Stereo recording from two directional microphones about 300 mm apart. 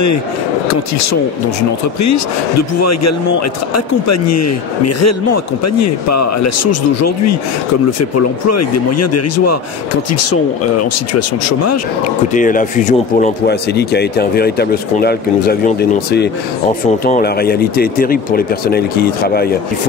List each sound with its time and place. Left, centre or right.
2.0 s speech: left
12.4 s speech: left